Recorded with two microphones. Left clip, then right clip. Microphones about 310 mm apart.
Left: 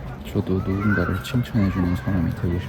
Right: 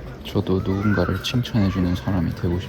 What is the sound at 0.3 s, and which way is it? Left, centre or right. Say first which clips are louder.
Speech: right 2 dB; centre.